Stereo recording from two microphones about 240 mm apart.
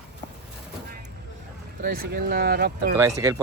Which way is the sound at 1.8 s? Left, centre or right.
Right.